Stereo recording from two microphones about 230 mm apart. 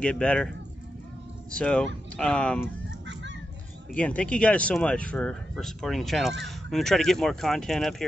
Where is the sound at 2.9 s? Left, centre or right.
Right.